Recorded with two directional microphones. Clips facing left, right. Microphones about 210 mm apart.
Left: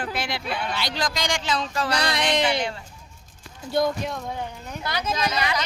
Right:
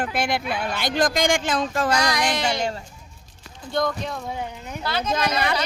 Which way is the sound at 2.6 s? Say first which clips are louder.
Right 2 dB; 40° right (ahead or behind).